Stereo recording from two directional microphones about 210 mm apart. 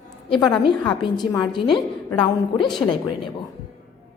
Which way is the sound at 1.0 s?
20° left (ahead or behind).